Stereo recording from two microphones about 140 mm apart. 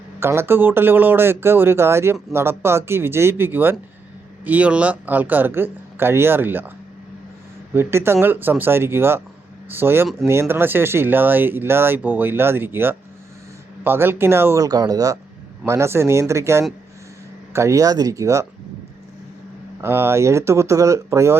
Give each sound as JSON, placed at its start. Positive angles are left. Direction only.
{"t": 0.2, "sound": "speech", "side_deg": -20}
{"t": 7.7, "sound": "speech", "side_deg": -15}
{"t": 19.8, "sound": "speech", "side_deg": -15}